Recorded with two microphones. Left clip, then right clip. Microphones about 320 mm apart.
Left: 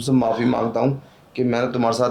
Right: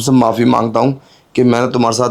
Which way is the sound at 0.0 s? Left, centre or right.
Right.